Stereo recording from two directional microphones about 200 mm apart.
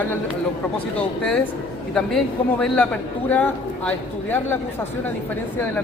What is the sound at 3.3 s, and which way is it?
A man's voice, 10° left (ahead or behind).